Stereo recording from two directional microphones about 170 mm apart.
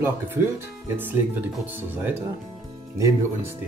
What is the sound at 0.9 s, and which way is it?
Speech, 10° right (ahead or behind).